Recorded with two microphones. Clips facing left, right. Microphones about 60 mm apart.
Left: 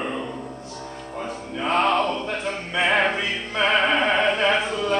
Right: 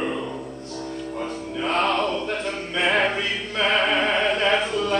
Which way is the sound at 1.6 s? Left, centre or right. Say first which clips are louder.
Left 2 dB; centre.